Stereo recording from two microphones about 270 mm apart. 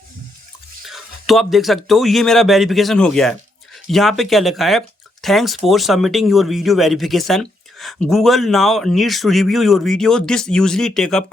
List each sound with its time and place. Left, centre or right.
0.9 s speech: centre